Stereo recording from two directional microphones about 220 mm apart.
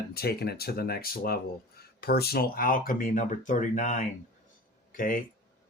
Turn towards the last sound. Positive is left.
turn(degrees=40)  # may be behind; listen again after turning